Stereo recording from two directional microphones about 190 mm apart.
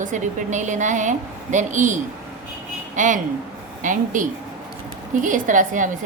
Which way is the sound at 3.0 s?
45° right (ahead or behind).